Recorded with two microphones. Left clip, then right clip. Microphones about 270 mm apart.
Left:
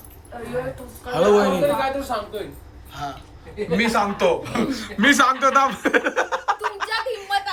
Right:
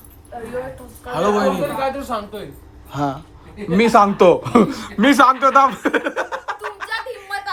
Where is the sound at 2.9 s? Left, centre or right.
Centre.